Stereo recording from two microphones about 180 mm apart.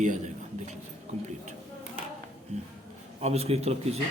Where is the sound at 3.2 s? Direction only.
35° right (ahead or behind).